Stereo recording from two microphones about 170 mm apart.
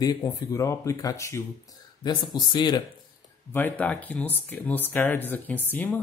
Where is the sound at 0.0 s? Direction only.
20° left (ahead or behind).